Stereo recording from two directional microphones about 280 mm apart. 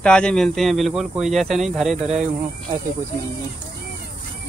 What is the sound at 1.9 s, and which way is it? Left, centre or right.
Speech, right.